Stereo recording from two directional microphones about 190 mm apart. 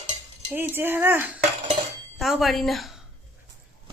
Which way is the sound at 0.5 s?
10° right (ahead or behind).